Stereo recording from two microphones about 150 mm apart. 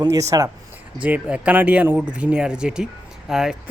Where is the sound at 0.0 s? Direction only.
20° right (ahead or behind).